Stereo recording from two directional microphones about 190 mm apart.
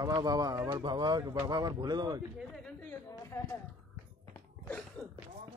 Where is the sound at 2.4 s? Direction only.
5° left (ahead or behind).